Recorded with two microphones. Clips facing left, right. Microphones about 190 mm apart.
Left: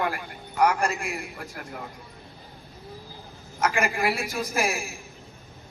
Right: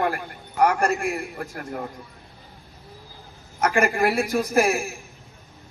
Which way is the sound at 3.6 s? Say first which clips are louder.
Right 4 dB; 55° right (ahead or behind).